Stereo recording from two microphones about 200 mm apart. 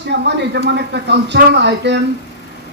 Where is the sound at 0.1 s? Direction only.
60° right (ahead or behind).